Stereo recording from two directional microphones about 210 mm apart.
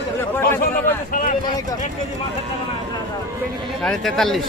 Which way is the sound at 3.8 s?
Centre (ahead or behind).